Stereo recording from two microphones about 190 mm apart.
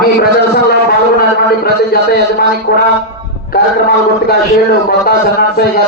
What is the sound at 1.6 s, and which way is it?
A man's voice, 50° left (ahead or behind).